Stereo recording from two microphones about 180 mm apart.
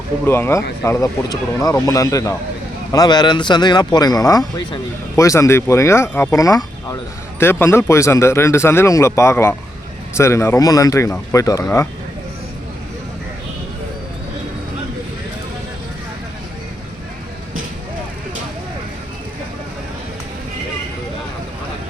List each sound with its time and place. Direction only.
0.3 s speech: 15° left (ahead or behind)